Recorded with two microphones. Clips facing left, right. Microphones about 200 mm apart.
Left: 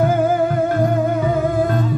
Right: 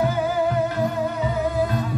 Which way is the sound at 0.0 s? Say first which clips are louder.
Left 5 dB; 50° left (ahead or behind).